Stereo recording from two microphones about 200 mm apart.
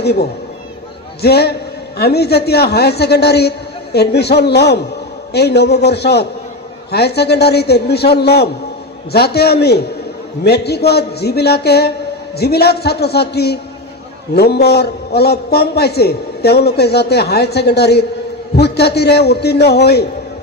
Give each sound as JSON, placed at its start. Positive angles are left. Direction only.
{"t": 0.0, "sound": "a man's voice", "side_deg": 55}